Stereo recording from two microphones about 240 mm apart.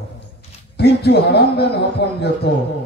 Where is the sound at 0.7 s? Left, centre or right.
Left.